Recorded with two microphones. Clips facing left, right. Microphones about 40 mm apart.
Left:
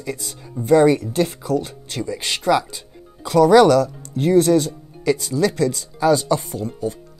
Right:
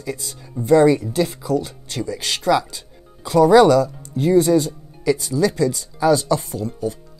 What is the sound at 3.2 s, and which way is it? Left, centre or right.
Speech, left.